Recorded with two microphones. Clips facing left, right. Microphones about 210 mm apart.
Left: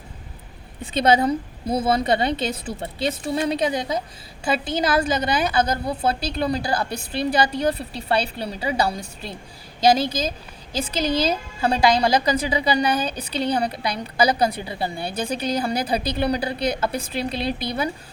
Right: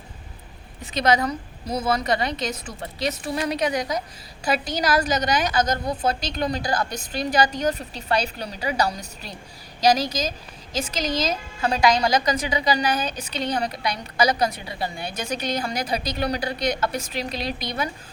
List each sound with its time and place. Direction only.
0.9 s a woman's voice: 30° left (ahead or behind)